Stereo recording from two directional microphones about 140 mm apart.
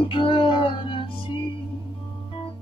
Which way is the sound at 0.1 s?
35° left (ahead or behind).